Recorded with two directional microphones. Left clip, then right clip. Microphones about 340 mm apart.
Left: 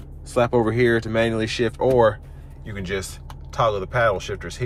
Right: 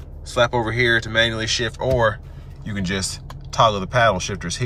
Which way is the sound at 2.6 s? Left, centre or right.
Centre.